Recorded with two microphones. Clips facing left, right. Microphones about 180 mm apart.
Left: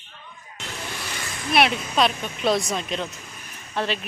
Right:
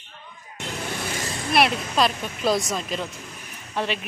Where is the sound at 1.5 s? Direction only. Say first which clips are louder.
Even; centre (ahead or behind).